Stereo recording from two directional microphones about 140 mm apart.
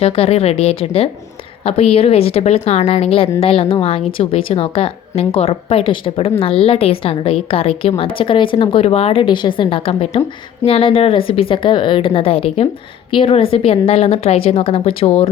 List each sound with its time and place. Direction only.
0.0 s a woman's voice: 45° left (ahead or behind)